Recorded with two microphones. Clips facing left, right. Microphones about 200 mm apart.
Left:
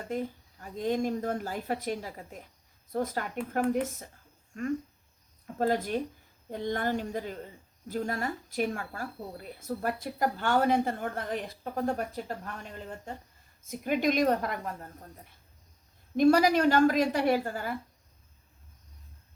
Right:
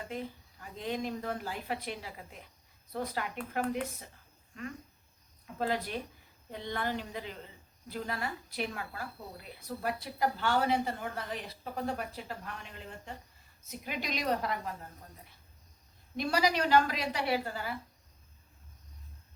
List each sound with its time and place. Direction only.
0.1 s speech: 45° left (ahead or behind)
16.1 s speech: 50° left (ahead or behind)